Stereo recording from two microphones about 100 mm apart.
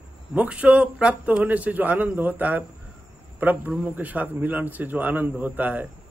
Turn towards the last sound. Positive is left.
turn(degrees=-15)  # may be behind; listen again after turning